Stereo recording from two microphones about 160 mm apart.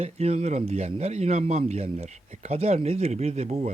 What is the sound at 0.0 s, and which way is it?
Speech, 40° right (ahead or behind).